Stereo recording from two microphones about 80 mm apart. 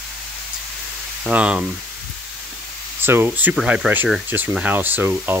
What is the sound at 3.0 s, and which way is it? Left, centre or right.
Speech, right.